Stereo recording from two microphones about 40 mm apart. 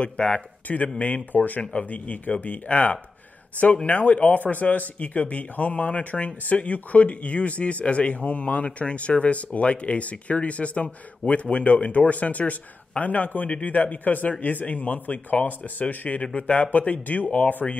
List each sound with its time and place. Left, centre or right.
0.0 s speech: left
1.7 s speech: left